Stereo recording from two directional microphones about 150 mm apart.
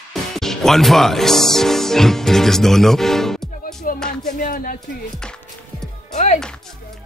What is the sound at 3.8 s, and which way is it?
Music, 70° left (ahead or behind).